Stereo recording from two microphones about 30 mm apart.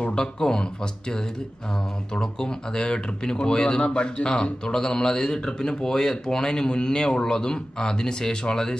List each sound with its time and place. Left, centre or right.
0.1 s speech: left
2.1 s speech: left